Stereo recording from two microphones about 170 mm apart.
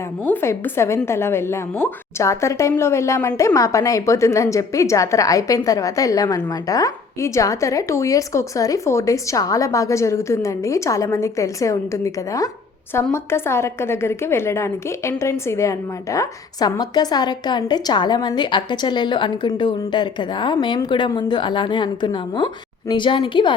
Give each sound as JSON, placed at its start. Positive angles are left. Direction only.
{"t": 0.3, "sound": "speech", "side_deg": 15}